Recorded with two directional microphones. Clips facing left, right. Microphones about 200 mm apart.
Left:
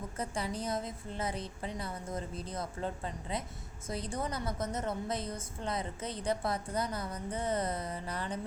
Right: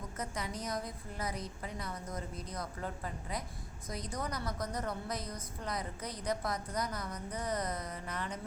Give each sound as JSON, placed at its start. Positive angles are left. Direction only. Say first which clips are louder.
{"t": 0.2, "sound": "a woman's voice", "louder": "left 4 dB", "side_deg": 30}